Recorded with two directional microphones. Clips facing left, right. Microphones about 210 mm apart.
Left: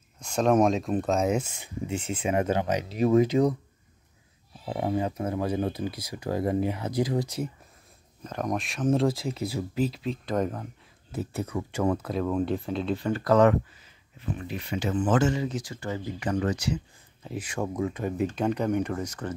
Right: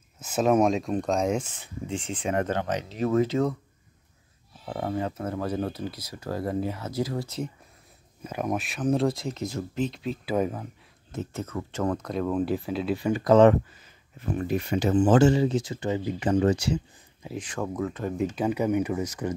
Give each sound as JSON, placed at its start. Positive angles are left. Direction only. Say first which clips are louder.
{"t": 0.2, "sound": "speech", "louder": "even", "side_deg": -5}
{"t": 4.6, "sound": "speech", "louder": "left 2 dB", "side_deg": 15}
{"t": 8.2, "sound": "speech", "louder": "right 1 dB", "side_deg": -10}
{"t": 10.2, "sound": "speech", "louder": "right 2 dB", "side_deg": -5}
{"t": 11.1, "sound": "speech", "louder": "left 1 dB", "side_deg": 10}
{"t": 14.2, "sound": "speech", "louder": "right 7 dB", "side_deg": -45}
{"t": 15.0, "sound": "speech", "louder": "right 5 dB", "side_deg": -30}
{"t": 17.3, "sound": "speech", "louder": "even", "side_deg": 10}
{"t": 18.2, "sound": "speech", "louder": "right 1 dB", "side_deg": -5}